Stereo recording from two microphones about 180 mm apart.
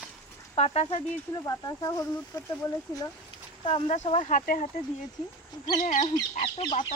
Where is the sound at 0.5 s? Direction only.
35° left (ahead or behind).